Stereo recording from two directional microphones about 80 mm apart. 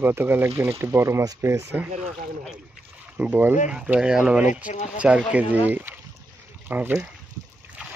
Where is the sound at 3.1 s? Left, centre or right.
Centre.